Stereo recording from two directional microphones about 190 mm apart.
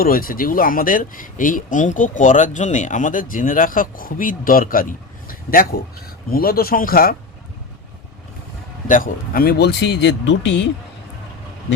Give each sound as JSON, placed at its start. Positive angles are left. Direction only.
{"t": 0.0, "sound": "speech", "side_deg": 50}
{"t": 8.9, "sound": "speech", "side_deg": 50}